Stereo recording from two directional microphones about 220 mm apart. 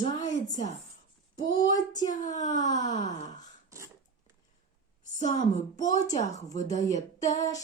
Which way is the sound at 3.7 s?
15° right (ahead or behind).